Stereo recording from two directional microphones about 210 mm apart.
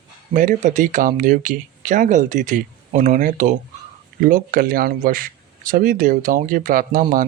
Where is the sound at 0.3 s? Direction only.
35° right (ahead or behind).